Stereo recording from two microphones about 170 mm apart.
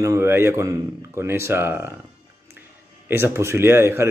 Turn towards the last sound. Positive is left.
turn(degrees=-15)  # may be behind; listen again after turning